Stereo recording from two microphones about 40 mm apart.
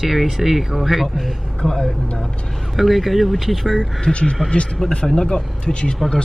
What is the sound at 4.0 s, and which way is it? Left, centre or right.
Speech, left.